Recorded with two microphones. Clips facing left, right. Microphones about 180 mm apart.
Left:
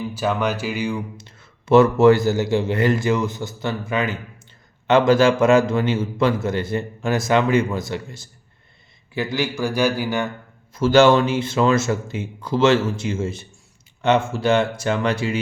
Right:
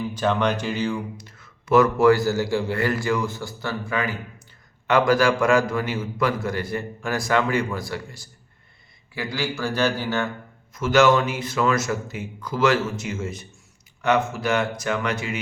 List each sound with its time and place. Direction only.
0.1 s a man's voice: 5° left (ahead or behind)
1.1 s a man's voice: 25° left (ahead or behind)
10.8 s a man's voice: 30° left (ahead or behind)